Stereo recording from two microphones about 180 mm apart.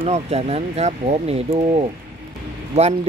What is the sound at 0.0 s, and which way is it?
Speech, 35° right (ahead or behind).